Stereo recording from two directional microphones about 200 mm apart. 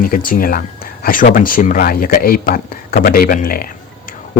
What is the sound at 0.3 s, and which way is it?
Speech, 45° left (ahead or behind).